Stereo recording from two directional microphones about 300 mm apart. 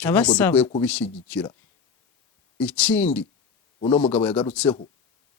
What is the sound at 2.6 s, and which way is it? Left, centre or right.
Speech, centre.